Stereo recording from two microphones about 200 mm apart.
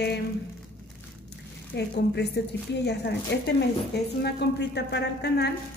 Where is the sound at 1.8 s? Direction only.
55° left (ahead or behind).